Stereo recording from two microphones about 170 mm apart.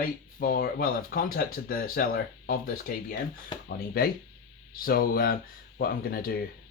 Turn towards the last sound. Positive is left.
turn(degrees=60)  # may be behind; listen again after turning